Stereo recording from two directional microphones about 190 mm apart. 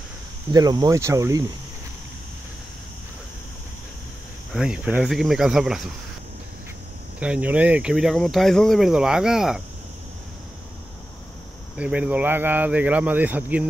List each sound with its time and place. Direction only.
0.5 s speech: 20° right (ahead or behind)
4.5 s speech: 5° right (ahead or behind)
7.2 s speech: 5° right (ahead or behind)
11.7 s speech: 5° right (ahead or behind)